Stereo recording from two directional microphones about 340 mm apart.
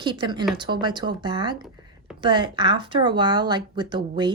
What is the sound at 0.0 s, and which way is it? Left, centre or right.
Speech, centre.